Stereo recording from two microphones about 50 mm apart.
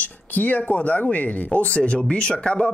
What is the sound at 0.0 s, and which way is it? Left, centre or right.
Speech, left.